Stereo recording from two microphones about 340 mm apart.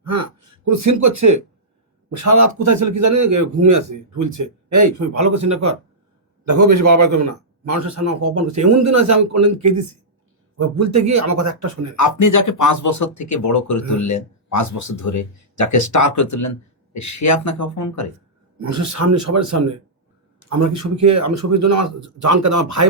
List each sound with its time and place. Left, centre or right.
0.0 s a man's voice: right
6.5 s speech: right
10.8 s speech: right
11.9 s speech: left
18.6 s speech: right